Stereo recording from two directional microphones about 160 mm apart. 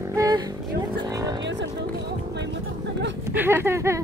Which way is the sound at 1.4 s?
90° right.